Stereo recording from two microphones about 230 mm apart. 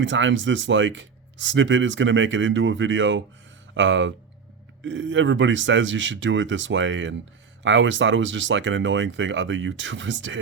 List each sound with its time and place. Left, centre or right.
0.0 s speech: right